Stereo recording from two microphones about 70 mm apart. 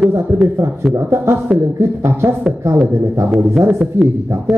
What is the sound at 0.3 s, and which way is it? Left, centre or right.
Speech, right.